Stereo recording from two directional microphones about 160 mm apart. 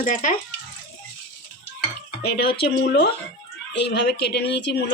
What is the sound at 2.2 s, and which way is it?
Speech, 85° left.